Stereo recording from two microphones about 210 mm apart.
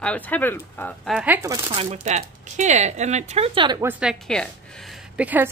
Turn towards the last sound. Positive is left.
turn(degrees=-10)  # may be behind; listen again after turning